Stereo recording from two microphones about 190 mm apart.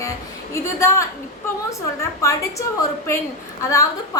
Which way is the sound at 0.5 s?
15° left (ahead or behind).